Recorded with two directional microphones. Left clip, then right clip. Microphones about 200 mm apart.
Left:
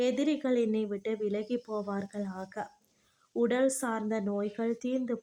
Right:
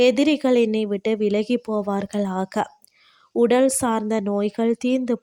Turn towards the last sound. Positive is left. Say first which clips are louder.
# right 11 dB
turn(degrees=-35)  # may be behind; listen again after turning